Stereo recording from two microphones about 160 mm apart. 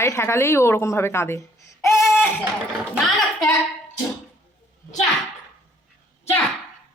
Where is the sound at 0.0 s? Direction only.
15° left (ahead or behind).